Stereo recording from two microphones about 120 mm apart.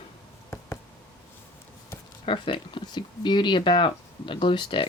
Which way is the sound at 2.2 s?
45° left (ahead or behind).